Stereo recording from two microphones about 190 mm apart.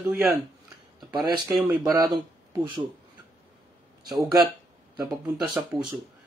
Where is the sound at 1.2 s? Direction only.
20° right (ahead or behind).